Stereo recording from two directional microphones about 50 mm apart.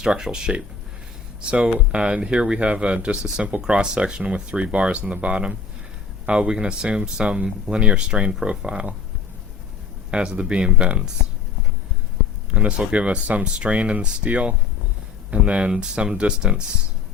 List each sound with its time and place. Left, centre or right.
0.0 s speech: centre
10.1 s speech: centre
12.5 s speech: right